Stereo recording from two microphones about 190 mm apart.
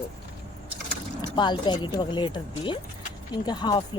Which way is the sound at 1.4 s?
25° left (ahead or behind).